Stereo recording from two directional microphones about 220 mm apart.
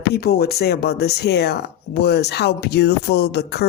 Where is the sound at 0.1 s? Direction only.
45° left (ahead or behind).